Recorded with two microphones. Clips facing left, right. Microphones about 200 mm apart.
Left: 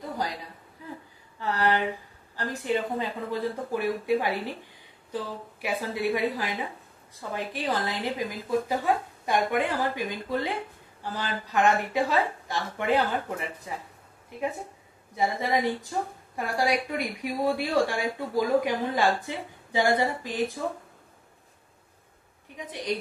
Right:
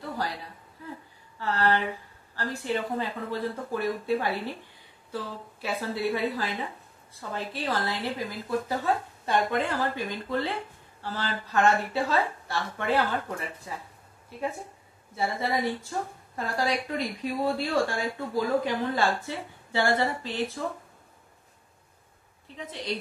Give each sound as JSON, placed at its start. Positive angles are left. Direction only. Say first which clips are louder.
{"t": 1.4, "sound": "speech", "louder": "even", "side_deg": 15}
{"t": 15.1, "sound": "speech", "louder": "left 2 dB", "side_deg": 15}
{"t": 22.6, "sound": "speech", "louder": "left 3 dB", "side_deg": 15}